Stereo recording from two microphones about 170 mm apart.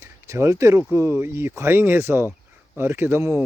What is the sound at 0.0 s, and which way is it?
Speech, 15° right (ahead or behind).